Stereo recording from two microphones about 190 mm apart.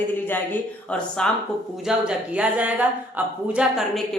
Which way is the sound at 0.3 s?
10° left (ahead or behind).